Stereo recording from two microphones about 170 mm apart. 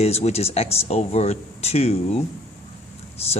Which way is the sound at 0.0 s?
40° left (ahead or behind).